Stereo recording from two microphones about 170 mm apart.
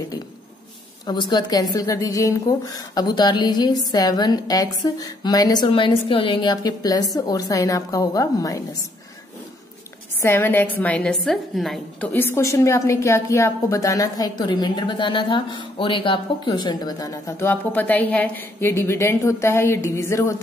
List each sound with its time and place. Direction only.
1.0 s a woman's voice: 25° left (ahead or behind)
10.2 s a woman's voice: 15° left (ahead or behind)